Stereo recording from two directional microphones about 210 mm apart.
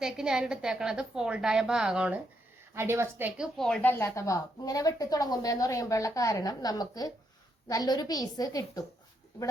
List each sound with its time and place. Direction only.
0.0 s a woman's voice: 5° right (ahead or behind); by 8.8 s 15° left (ahead or behind)